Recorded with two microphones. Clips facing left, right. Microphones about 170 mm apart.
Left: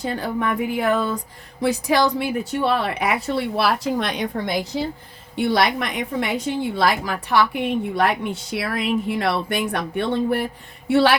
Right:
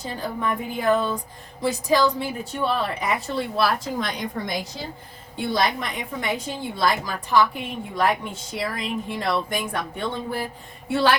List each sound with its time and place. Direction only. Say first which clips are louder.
0.0 s a woman's voice: left 4 dB; 75° left (ahead or behind)